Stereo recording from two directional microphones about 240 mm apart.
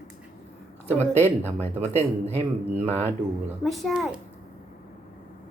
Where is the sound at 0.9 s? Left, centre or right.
Right.